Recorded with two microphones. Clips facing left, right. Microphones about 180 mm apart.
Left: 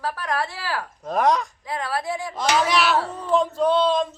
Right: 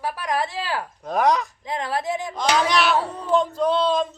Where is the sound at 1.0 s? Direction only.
Centre (ahead or behind).